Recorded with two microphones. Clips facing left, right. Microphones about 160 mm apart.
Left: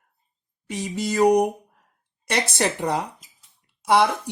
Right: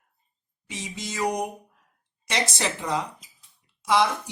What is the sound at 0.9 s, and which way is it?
Speech, 65° left (ahead or behind).